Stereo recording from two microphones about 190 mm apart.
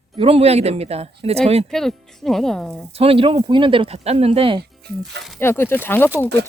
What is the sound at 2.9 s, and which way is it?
Speech, 30° right (ahead or behind).